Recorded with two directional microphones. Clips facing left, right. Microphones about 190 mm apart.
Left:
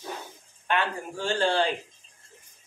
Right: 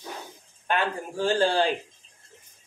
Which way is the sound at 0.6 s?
35° right (ahead or behind).